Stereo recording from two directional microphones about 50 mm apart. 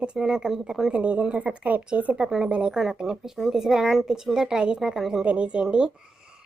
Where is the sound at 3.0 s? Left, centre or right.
Centre.